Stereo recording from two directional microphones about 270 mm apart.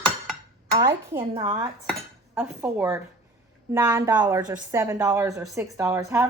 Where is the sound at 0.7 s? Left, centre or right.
Centre.